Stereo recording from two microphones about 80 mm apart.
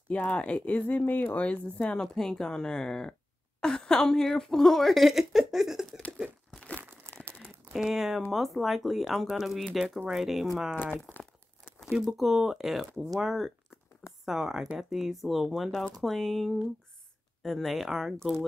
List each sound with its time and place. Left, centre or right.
0.1 s a woman's voice: centre
7.1 s crumpling: left
7.4 s a sound: centre
8.3 s a woman's voice: centre
10.8 s speech: left
11.9 s a woman's voice: centre